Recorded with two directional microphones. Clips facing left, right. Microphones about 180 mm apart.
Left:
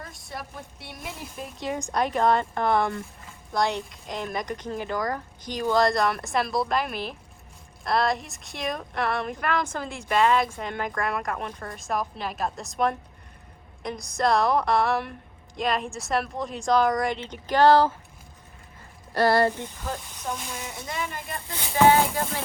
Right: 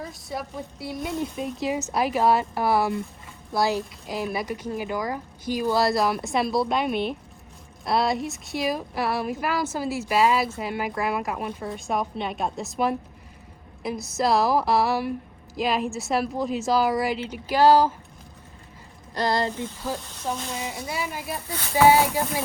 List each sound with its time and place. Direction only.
0.0 s speech: centre (ahead or behind)
19.1 s speech: 15° right (ahead or behind)
20.6 s speech: 5° right (ahead or behind)